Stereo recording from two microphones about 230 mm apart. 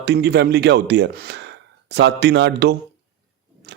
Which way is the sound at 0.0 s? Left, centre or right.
Right.